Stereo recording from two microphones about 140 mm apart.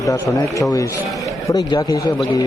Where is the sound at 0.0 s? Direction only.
25° left (ahead or behind).